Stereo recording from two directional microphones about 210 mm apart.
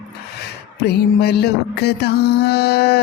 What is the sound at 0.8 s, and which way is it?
Music, 50° left (ahead or behind).